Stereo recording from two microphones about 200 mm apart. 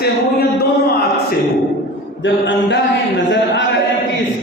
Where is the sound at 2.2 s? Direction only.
65° left (ahead or behind).